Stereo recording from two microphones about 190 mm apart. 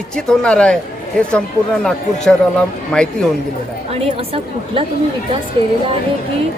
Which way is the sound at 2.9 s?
5° left (ahead or behind).